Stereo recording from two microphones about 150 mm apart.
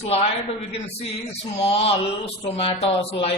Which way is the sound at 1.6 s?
45° left (ahead or behind).